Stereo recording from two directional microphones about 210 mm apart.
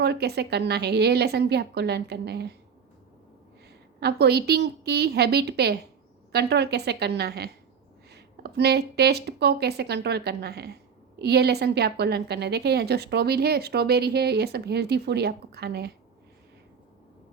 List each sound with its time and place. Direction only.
0.0 s a woman's voice: 50° right (ahead or behind)
4.0 s a woman's voice: 50° right (ahead or behind)